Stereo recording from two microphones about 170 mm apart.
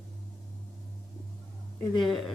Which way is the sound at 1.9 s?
Centre (ahead or behind).